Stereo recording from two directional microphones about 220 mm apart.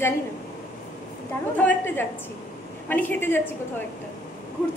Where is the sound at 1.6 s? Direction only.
5° left (ahead or behind).